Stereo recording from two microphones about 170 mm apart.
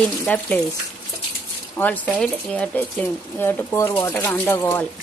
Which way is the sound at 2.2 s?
5° left (ahead or behind).